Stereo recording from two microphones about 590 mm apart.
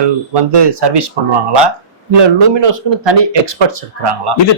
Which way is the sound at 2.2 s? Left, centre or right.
Right.